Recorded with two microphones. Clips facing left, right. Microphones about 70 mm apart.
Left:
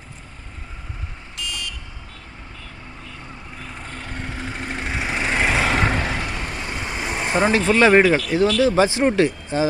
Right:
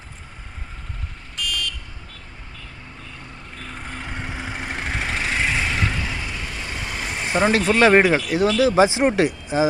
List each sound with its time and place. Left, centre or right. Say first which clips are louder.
1.4 s vehicle: right 3 dB; left
3.9 s vehicle: right 1 dB; centre
5.4 s vehicle: left 5 dB; left
5.9 s vehicle: left 4 dB; left
6.7 s vehicle: left 2 dB; centre
7.4 s speech: even; centre